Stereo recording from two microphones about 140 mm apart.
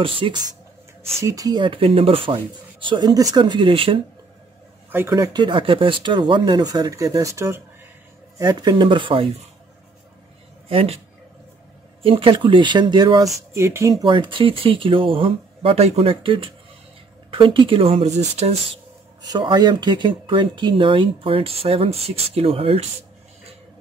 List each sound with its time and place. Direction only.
0.0 s speech: 40° right (ahead or behind)
1.2 s speech: 25° right (ahead or behind)
5.1 s speech: 30° right (ahead or behind)
10.7 s speech: 45° right (ahead or behind)
12.0 s speech: 40° right (ahead or behind); by 13.9 s 20° right (ahead or behind)
14.0 s speech: 35° right (ahead or behind)
19.2 s speech: 30° right (ahead or behind)